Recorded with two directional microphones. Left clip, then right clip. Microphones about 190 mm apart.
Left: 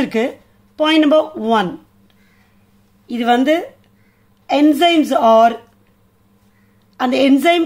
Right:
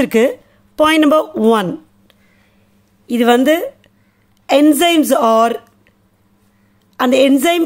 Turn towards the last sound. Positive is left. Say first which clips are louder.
# right 1 dB
turn(degrees=-35)  # may be behind; listen again after turning